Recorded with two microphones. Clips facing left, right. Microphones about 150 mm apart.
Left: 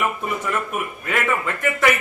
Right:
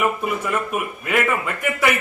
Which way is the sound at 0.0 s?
5° right (ahead or behind).